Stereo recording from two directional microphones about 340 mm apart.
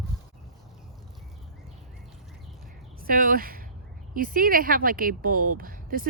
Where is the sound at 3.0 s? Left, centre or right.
Right.